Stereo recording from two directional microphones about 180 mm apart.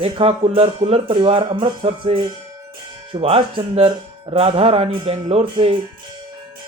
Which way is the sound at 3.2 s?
30° right (ahead or behind).